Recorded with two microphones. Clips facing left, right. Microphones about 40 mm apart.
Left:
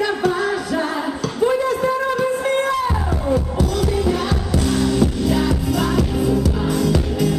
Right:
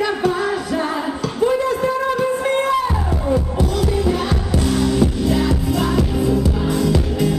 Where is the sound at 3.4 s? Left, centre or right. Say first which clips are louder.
Even; centre.